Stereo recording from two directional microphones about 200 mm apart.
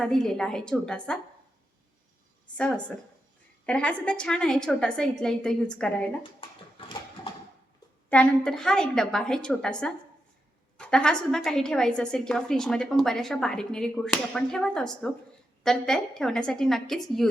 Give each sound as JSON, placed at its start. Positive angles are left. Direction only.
{"t": 0.0, "sound": "a woman's voice", "side_deg": 0}
{"t": 2.6, "sound": "a woman's voice", "side_deg": 5}
{"t": 6.4, "sound": "dog", "side_deg": 25}
{"t": 8.1, "sound": "a woman's voice", "side_deg": 5}